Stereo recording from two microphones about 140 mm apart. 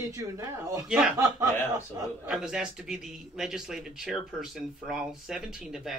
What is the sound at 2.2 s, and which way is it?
A man's voice, 5° right (ahead or behind).